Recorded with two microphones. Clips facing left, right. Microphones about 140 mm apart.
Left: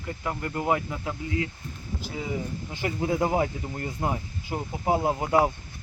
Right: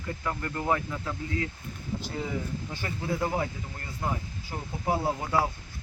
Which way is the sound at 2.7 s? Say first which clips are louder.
Left 7 dB; 15° left (ahead or behind).